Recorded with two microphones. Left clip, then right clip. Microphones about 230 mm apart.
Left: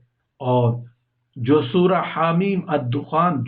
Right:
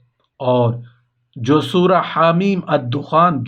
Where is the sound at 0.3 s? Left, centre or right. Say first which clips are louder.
Right 4 dB; right.